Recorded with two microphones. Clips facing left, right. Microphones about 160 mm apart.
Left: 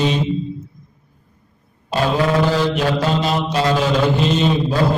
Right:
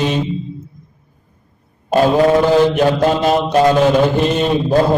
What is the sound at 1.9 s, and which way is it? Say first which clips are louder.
Mantra: right 6 dB; 50° right (ahead or behind).